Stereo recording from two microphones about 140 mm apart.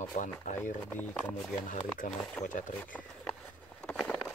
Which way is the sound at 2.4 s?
65° left (ahead or behind).